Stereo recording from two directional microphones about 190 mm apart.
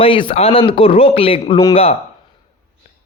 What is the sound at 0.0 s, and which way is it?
Speech, 25° left (ahead or behind).